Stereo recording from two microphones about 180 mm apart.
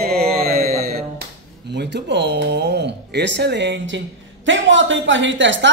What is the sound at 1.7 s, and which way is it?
A woman's voice, 70° right (ahead or behind).